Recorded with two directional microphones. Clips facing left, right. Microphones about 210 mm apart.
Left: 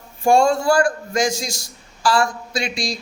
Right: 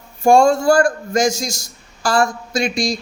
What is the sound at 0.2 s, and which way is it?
A man's voice, 45° right (ahead or behind).